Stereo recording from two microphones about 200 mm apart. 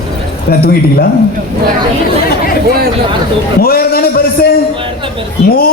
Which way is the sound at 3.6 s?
50° left (ahead or behind).